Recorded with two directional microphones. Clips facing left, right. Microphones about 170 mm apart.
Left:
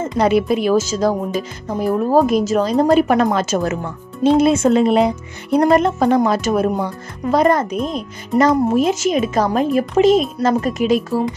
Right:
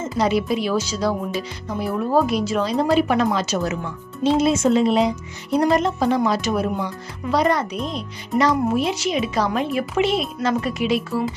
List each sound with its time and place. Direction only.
0.0 s speech: 55° left (ahead or behind)